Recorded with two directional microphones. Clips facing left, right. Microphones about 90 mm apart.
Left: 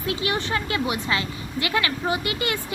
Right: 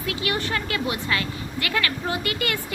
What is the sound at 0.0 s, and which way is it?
Speech, 25° left (ahead or behind).